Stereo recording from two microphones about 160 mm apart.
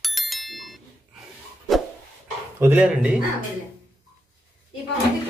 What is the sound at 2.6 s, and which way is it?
Speech, 10° right (ahead or behind).